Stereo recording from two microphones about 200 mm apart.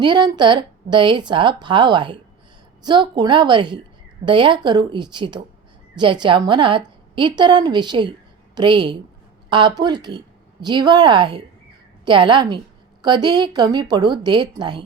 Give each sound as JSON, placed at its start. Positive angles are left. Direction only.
{"t": 0.0, "sound": "a woman's voice", "side_deg": -20}